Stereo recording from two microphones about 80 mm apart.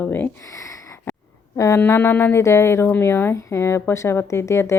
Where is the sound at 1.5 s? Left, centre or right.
Left.